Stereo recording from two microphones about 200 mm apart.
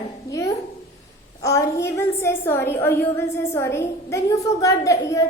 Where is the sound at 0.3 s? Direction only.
15° left (ahead or behind).